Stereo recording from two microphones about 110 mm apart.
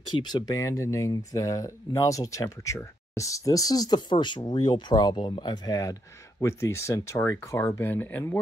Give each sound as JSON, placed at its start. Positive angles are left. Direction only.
{"t": 0.2, "sound": "speech", "side_deg": 35}